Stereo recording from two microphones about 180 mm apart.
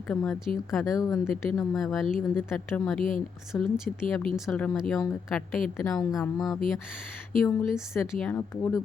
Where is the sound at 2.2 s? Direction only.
10° left (ahead or behind).